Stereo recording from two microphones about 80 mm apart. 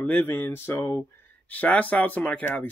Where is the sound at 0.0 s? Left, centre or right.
Left.